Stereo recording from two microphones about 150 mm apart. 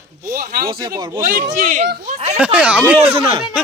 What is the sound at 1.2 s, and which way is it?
Speech, 75° right (ahead or behind).